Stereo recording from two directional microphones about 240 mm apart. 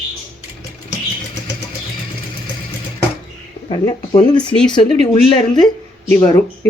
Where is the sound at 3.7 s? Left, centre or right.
Left.